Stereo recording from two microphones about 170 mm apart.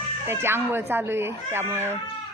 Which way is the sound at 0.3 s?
15° right (ahead or behind).